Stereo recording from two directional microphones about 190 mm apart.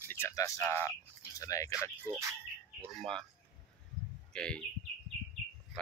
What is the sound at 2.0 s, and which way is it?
Speech, 15° right (ahead or behind).